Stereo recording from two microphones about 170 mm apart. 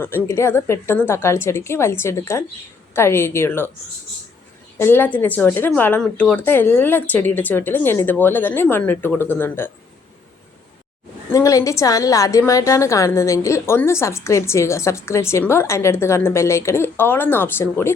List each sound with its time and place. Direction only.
0.0 s a woman's voice: 10° left (ahead or behind)
4.8 s a woman's voice: 15° left (ahead or behind)
11.3 s a woman's voice: 20° left (ahead or behind)